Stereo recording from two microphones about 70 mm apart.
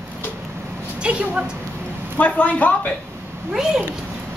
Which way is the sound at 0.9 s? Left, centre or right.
Centre.